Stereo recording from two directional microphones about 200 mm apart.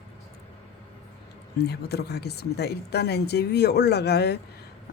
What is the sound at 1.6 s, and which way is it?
Speech, 55° left (ahead or behind).